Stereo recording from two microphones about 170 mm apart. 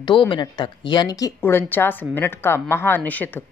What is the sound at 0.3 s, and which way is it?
A woman's voice, 25° left (ahead or behind).